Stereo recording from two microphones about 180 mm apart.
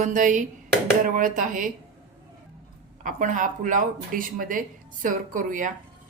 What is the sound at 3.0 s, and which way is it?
Speech, 45° right (ahead or behind).